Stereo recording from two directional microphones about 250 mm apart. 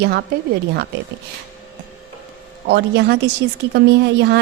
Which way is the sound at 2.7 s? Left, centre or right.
Right.